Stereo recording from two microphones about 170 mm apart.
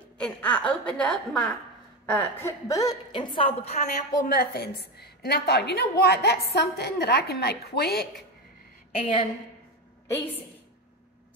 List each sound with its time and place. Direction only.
0.2 s a woman's voice: 5° left (ahead or behind); by 3.8 s 35° left (ahead or behind)
4.3 s a woman's voice: 60° left (ahead or behind)
8.9 s a woman's voice: 35° left (ahead or behind)